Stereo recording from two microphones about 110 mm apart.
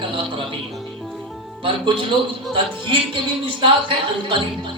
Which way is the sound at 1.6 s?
50° right (ahead or behind).